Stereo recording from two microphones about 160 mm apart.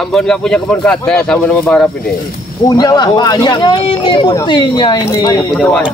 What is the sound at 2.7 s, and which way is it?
Speech, 25° left (ahead or behind).